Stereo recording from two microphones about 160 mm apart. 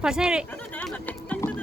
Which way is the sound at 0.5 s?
10° left (ahead or behind).